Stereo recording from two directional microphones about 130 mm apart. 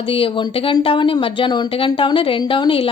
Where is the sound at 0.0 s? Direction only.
45° left (ahead or behind).